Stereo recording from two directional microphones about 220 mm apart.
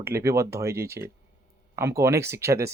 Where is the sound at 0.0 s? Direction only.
10° right (ahead or behind).